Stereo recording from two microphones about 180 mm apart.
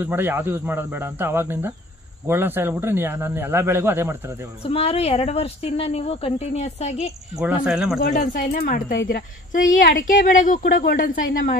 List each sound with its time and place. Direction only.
0.0 s a man's voice: 10° right (ahead or behind)
4.6 s a woman's voice: 35° left (ahead or behind)
7.3 s speech: 5° right (ahead or behind)
8.0 s a woman's voice: 50° left (ahead or behind)